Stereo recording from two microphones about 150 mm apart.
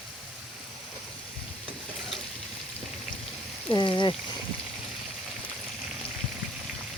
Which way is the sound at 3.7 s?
30° left (ahead or behind).